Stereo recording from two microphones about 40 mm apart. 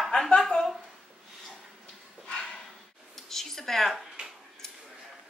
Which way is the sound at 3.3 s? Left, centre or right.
Centre.